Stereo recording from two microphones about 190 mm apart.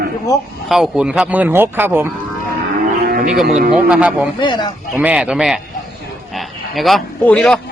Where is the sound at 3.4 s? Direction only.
45° right (ahead or behind).